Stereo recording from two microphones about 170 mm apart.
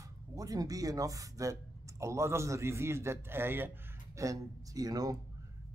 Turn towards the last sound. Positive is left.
turn(degrees=-20)  # may be behind; listen again after turning